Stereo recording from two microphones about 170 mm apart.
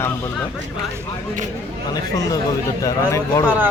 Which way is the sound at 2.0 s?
20° left (ahead or behind).